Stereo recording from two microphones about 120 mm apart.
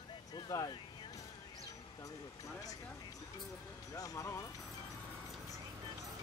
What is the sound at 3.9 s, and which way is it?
Speech, 30° left (ahead or behind).